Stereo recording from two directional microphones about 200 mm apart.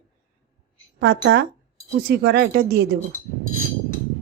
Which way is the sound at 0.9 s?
55° right (ahead or behind).